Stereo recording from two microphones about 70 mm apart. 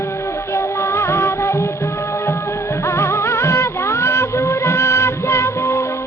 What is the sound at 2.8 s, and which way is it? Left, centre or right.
Music, left.